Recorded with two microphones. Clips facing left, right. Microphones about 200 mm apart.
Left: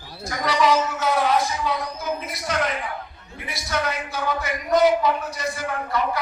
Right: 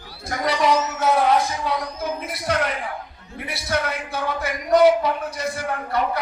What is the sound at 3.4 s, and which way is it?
A man's voice, 60° right (ahead or behind).